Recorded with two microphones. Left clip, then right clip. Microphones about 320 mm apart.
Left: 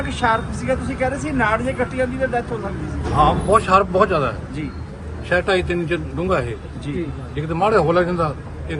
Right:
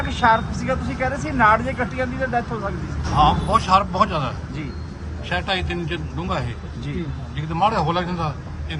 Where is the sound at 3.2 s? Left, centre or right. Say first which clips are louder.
Left 2 dB; centre.